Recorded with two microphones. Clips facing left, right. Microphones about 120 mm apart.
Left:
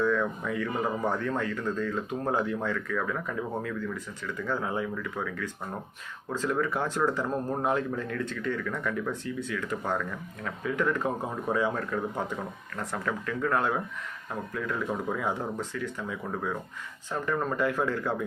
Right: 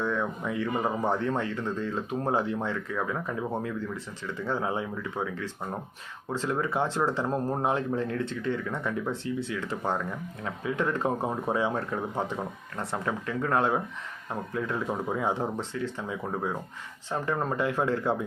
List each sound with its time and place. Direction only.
0.0 s speech: 20° right (ahead or behind)